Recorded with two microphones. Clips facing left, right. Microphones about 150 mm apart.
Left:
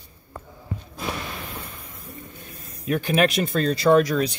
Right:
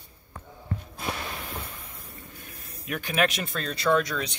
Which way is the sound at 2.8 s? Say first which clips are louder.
Left 6 dB; 35° left (ahead or behind).